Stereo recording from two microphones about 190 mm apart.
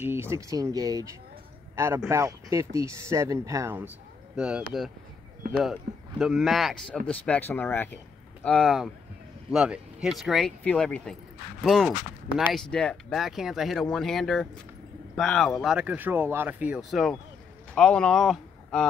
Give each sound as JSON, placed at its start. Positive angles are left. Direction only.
{"t": 0.0, "sound": "speech", "side_deg": -15}
{"t": 2.0, "sound": "speech", "side_deg": -15}